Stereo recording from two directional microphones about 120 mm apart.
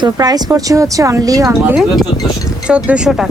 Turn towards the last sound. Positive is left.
turn(degrees=-5)  # may be behind; listen again after turning